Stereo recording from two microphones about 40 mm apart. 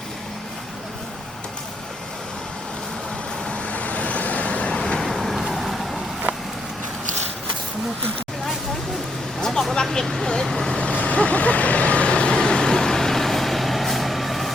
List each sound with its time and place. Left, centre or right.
3.7 s vehicle: left
4.8 s vehicle: centre
5.0 s vehicle: centre
9.9 s vehicle: centre
10.7 s vehicle: left
11.0 s vehicle: left; by 14.5 s centre